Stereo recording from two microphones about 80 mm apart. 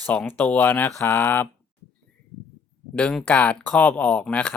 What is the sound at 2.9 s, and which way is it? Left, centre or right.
Speech, centre.